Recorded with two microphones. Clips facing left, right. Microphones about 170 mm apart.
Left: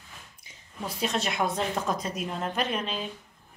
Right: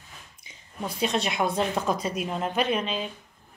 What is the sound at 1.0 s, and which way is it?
A woman's voice, centre (ahead or behind).